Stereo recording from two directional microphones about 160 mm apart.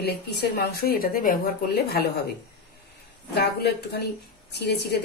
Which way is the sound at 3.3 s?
90° left.